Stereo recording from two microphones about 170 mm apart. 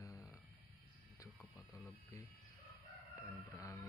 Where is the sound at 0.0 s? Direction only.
15° left (ahead or behind).